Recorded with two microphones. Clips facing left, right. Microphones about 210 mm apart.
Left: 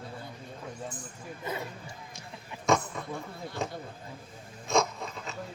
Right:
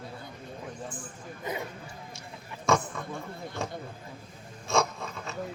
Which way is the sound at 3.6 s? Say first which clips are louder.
Left 1 dB; 20° left (ahead or behind).